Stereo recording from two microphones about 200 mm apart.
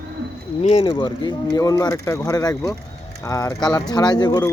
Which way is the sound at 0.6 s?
30° left (ahead or behind).